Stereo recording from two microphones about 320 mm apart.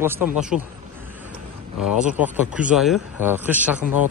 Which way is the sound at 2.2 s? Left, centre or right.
Centre.